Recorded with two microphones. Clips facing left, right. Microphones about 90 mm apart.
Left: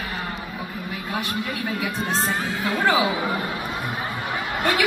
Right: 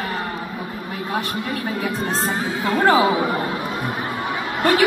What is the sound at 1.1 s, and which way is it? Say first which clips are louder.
Speech: right 3 dB; 40° right (ahead or behind).